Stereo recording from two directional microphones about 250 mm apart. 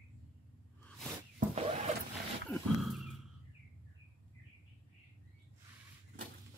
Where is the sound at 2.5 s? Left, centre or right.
Centre.